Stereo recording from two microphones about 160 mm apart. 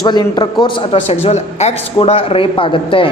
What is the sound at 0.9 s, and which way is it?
Speech, 40° left (ahead or behind).